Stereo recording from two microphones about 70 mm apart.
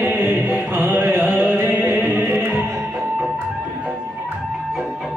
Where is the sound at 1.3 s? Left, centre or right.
Centre.